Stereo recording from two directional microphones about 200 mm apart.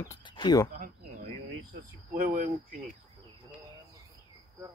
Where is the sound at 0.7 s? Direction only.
40° right (ahead or behind).